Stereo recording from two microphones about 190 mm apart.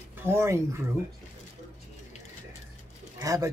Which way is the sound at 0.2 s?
15° right (ahead or behind).